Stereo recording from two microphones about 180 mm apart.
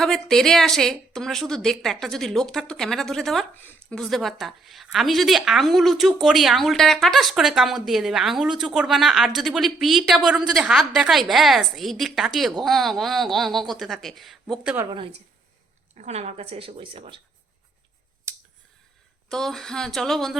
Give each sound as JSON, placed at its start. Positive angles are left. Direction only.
{"t": 0.0, "sound": "a woman's voice", "side_deg": 0}
{"t": 14.8, "sound": "a woman's voice", "side_deg": -30}
{"t": 19.3, "sound": "a woman's voice", "side_deg": 0}